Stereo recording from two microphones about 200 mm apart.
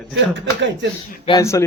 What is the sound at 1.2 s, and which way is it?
Speech, 15° left (ahead or behind).